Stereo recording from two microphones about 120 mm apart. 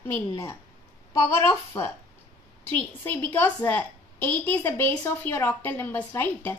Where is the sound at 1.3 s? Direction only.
20° left (ahead or behind).